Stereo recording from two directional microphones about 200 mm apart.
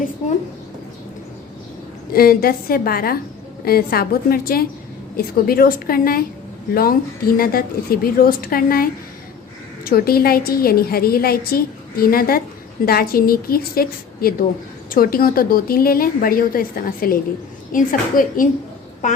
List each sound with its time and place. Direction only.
2.1 s a woman's voice: 50° left (ahead or behind)